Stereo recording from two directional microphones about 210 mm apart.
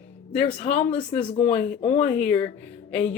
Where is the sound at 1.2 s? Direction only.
5° left (ahead or behind).